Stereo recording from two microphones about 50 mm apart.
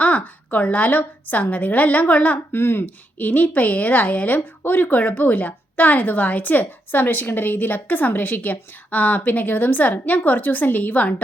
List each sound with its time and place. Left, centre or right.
0.0 s a woman's voice: left
2.5 s speech: left
3.2 s a woman's voice: left